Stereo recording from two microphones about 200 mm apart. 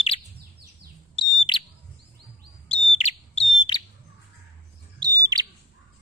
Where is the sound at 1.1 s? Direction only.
25° left (ahead or behind).